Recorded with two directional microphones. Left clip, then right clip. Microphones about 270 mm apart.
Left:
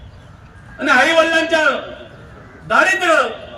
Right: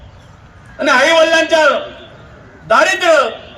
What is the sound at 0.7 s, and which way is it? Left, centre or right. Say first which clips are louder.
A man's voice: right 3 dB; centre.